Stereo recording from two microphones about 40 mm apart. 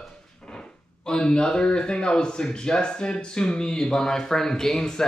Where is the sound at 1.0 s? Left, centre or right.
Centre.